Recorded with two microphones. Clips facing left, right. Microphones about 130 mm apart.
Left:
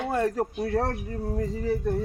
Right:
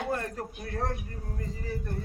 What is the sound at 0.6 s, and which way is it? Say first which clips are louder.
Speech: left 6 dB; 70° left (ahead or behind).